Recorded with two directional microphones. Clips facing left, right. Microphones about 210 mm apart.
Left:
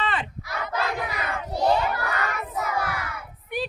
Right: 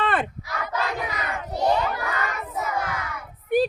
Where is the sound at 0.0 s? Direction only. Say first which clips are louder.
Right 4 dB; 55° right (ahead or behind).